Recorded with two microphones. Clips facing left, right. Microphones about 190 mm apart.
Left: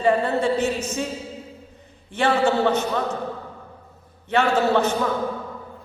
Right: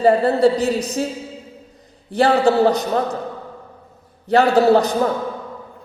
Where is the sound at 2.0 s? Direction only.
35° right (ahead or behind).